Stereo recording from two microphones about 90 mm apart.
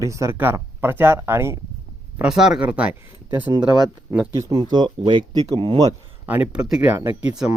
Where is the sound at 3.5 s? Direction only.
50° right (ahead or behind).